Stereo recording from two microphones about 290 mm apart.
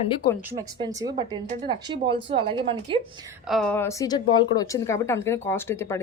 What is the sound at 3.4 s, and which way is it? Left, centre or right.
A woman's voice, centre.